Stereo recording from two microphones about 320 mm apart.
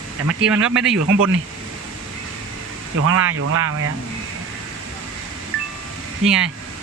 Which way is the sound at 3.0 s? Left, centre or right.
Right.